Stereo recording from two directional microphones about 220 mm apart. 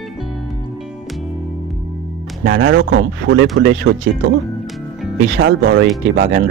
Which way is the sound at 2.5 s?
60° right (ahead or behind).